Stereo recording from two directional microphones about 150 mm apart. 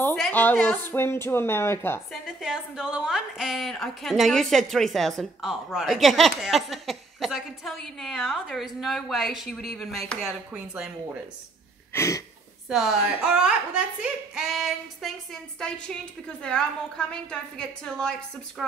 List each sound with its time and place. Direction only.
0.0 s speech: 10° left (ahead or behind)
2.2 s a woman's voice: 5° right (ahead or behind)
11.9 s a sound: 20° left (ahead or behind)
12.6 s a woman's voice: centre (ahead or behind)